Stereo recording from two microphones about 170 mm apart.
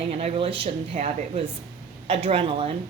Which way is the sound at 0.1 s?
35° right (ahead or behind).